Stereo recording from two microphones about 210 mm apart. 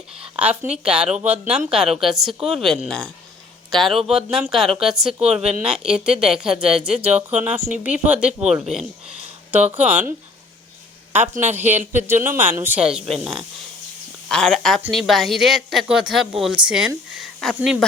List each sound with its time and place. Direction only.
0.3 s a woman's voice: 5° right (ahead or behind)
11.8 s speech: 40° right (ahead or behind)
12.2 s a woman's voice: 10° right (ahead or behind)